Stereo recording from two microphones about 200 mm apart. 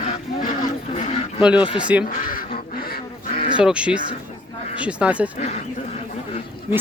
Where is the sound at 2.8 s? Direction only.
50° left (ahead or behind).